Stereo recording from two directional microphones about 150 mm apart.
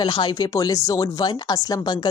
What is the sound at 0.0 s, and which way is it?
Speech, 30° left (ahead or behind).